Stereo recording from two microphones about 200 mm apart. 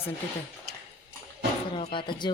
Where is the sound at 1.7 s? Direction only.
25° left (ahead or behind).